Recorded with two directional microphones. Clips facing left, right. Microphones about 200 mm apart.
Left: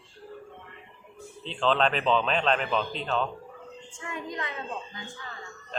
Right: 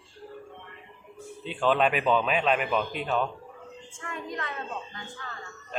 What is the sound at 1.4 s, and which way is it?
Speech, 10° right (ahead or behind).